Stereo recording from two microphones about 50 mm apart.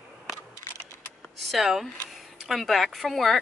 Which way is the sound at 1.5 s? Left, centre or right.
Centre.